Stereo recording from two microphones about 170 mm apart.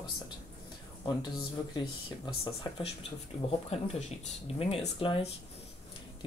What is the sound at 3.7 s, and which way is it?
Speech, 40° left (ahead or behind).